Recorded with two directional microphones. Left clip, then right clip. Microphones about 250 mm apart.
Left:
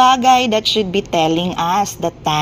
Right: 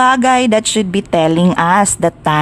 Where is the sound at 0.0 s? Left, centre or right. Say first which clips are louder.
Even; right.